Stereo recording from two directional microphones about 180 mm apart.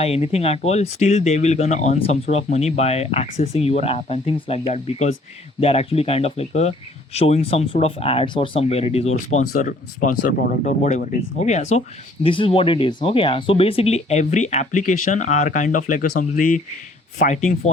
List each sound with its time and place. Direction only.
0.0 s speech: 35° left (ahead or behind)